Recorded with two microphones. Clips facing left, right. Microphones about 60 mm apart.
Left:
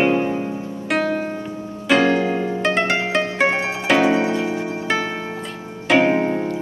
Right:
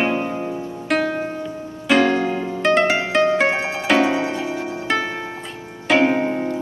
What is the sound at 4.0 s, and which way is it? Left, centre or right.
Harp, left.